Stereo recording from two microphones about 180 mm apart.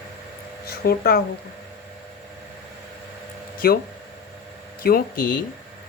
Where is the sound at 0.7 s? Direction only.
60° left (ahead or behind).